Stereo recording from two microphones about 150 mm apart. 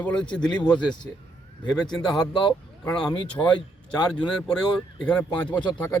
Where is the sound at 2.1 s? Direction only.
30° left (ahead or behind).